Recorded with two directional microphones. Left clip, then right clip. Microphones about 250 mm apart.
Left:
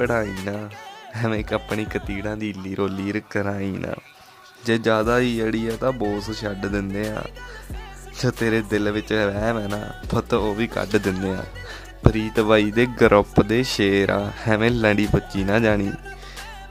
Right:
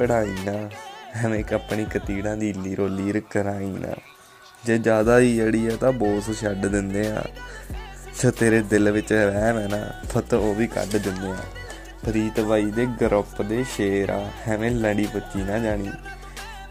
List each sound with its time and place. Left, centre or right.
0.0 s speech: centre
12.1 s speech: centre